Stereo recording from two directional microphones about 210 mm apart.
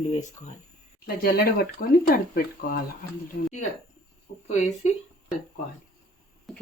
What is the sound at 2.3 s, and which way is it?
Speech, 45° left (ahead or behind).